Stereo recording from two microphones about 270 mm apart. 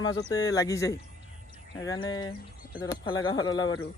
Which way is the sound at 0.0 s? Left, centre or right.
Centre.